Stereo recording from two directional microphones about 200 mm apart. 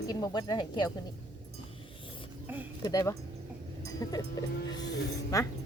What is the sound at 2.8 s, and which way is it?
Speech, 15° left (ahead or behind).